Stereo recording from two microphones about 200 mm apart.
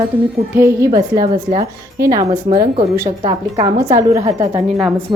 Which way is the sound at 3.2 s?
25° right (ahead or behind).